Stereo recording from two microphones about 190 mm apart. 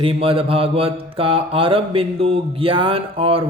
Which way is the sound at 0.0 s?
30° right (ahead or behind).